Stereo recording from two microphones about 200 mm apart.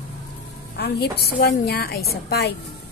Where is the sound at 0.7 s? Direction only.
55° left (ahead or behind).